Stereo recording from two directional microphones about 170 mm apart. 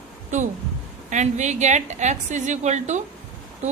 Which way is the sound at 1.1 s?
45° right (ahead or behind).